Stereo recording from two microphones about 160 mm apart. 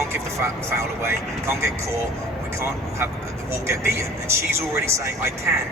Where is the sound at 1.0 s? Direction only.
15° right (ahead or behind).